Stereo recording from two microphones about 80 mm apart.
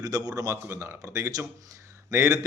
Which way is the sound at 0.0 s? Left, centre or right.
Right.